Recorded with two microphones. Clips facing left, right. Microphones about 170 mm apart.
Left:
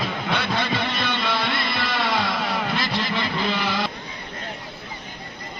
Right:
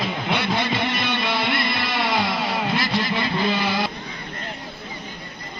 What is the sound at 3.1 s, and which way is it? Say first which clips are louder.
Vehicle: right 2 dB; 15° right (ahead or behind).